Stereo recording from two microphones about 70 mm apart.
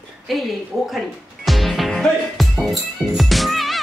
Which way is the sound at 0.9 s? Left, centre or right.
Centre.